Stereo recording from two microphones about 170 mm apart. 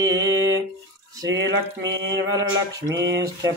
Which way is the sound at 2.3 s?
20° right (ahead or behind).